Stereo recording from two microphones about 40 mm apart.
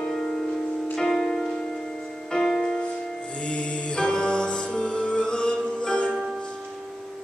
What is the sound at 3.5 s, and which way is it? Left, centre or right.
Music, left.